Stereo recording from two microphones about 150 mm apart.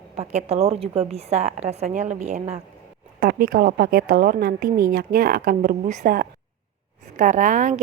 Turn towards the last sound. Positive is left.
turn(degrees=-55)  # may be behind; listen again after turning